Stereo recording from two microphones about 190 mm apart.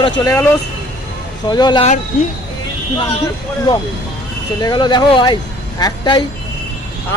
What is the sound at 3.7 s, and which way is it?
Speech, 20° left (ahead or behind).